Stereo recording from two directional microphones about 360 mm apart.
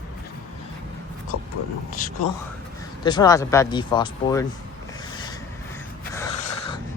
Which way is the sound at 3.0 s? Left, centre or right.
Centre.